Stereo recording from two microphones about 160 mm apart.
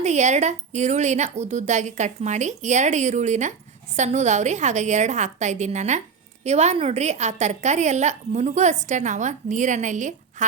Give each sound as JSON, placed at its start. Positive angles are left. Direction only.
{"t": 0.0, "sound": "a woman's voice", "side_deg": -45}